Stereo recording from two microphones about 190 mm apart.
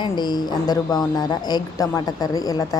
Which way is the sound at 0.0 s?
20° left (ahead or behind).